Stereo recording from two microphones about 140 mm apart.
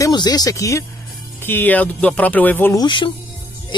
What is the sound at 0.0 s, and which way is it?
Speech, 30° left (ahead or behind).